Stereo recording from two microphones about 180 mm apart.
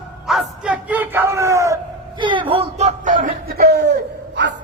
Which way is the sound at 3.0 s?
50° right (ahead or behind).